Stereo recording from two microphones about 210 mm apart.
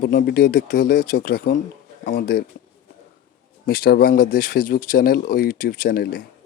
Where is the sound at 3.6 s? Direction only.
45° left (ahead or behind).